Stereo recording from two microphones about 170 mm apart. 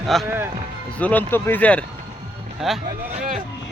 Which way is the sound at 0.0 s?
Centre (ahead or behind).